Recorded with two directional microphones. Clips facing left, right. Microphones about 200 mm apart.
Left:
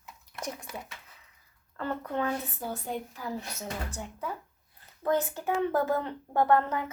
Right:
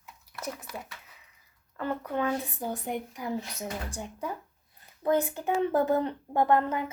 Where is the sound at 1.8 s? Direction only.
15° right (ahead or behind).